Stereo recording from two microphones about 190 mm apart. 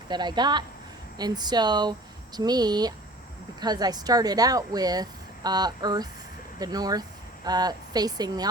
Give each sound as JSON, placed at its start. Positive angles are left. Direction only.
{"t": 0.1, "sound": "speech", "side_deg": -25}